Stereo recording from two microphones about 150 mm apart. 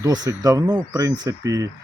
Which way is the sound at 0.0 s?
25° right (ahead or behind).